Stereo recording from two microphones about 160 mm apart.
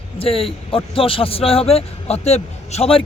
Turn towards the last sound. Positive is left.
turn(degrees=35)  # may be behind; listen again after turning